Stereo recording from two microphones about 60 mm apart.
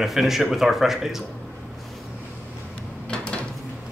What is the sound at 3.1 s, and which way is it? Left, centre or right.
Dishes, centre.